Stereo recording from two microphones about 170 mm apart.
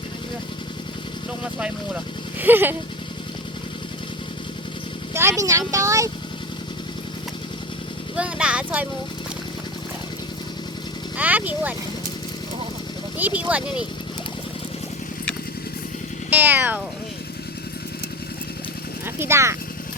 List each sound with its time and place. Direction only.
1.5 s speech: 5° right (ahead or behind)
5.1 s speech: 15° right (ahead or behind)
8.1 s speech: 5° right (ahead or behind)
11.2 s speech: 10° right (ahead or behind)
13.1 s speech: 10° right (ahead or behind)
16.3 s speech: 10° right (ahead or behind)
19.0 s speech: 15° right (ahead or behind)